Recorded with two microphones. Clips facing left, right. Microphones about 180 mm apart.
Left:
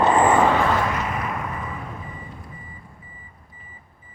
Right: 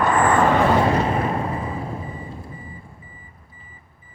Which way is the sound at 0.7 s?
30° right (ahead or behind).